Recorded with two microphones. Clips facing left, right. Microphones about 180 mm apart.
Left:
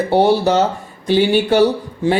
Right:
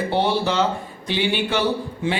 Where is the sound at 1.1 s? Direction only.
40° left (ahead or behind).